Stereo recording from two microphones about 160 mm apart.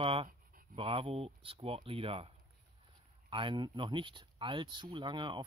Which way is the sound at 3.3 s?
30° right (ahead or behind).